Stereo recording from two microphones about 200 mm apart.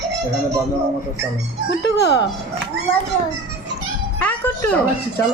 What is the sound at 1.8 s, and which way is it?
Speech, 55° left (ahead or behind).